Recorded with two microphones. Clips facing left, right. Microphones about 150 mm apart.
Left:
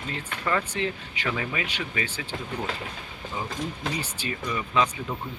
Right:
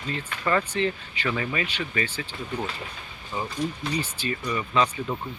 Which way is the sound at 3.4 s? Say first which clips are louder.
Right 3 dB; 90° left.